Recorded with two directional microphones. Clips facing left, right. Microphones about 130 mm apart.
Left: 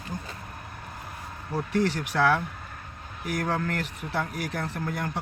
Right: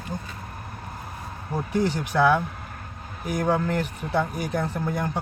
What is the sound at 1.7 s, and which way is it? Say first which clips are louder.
Speech: right 3 dB; 15° right (ahead or behind).